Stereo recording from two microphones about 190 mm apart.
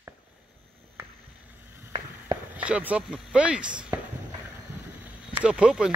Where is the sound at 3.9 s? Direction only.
15° right (ahead or behind).